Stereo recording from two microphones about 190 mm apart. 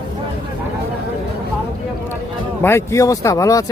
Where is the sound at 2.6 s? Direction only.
15° left (ahead or behind).